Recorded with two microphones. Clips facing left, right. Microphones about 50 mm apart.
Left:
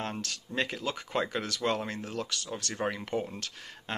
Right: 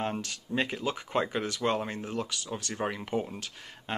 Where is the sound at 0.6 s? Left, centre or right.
Centre.